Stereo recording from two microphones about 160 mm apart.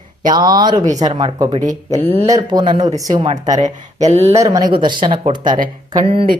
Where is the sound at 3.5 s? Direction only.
50° right (ahead or behind).